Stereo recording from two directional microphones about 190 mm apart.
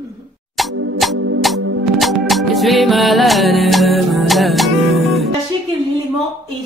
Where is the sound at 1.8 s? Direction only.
Centre (ahead or behind).